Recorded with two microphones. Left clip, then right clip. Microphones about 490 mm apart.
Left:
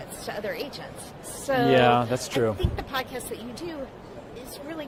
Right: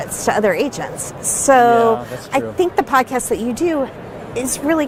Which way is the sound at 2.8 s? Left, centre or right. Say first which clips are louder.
Right 16 dB; right.